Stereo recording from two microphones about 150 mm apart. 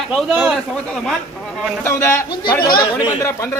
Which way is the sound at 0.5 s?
5° left (ahead or behind).